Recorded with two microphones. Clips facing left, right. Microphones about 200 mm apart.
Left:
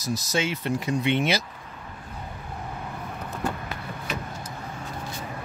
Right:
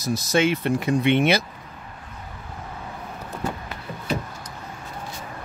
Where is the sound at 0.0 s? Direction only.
55° right (ahead or behind).